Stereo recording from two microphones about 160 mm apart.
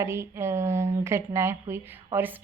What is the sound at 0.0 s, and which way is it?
A woman's voice, 15° right (ahead or behind).